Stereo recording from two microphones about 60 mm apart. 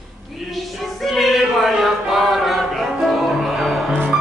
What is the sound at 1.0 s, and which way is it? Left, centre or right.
Choir, centre.